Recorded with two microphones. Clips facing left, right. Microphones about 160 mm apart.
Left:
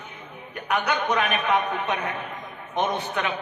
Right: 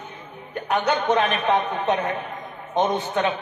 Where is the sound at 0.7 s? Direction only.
30° right (ahead or behind).